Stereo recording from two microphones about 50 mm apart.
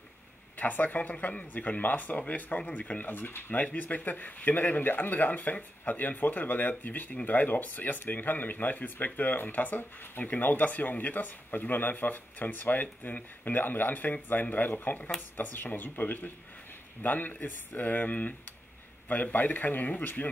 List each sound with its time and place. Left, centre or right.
0.6 s speech: left
3.5 s speech: left
19.3 s speech: left